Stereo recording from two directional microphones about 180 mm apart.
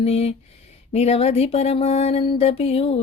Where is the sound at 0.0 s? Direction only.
35° left (ahead or behind).